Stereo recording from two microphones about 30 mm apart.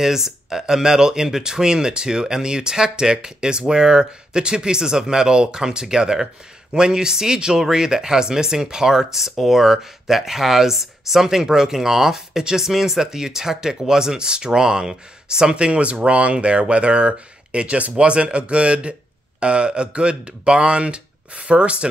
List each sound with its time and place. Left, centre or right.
0.0 s speech: centre
15.5 s speech: right